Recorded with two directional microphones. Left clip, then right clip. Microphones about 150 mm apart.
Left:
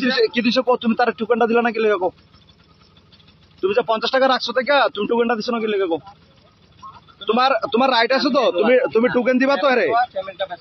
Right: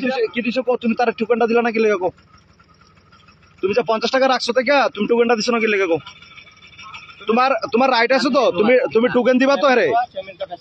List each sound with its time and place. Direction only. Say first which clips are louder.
0.0 s speech: left 2 dB; 25° left (ahead or behind)
0.7 s speech: even; 5° left (ahead or behind)
3.6 s a man's voice: even; 15° right (ahead or behind)
7.2 s a man's voice: even; 10° right (ahead or behind)
8.8 s a man's voice: right 1 dB; 5° right (ahead or behind)